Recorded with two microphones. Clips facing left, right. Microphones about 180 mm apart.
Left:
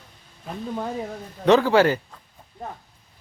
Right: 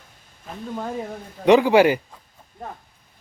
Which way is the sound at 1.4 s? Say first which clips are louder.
Right 2 dB; 15° right (ahead or behind).